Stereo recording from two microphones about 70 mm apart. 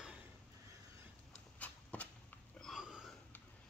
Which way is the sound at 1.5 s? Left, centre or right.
Left.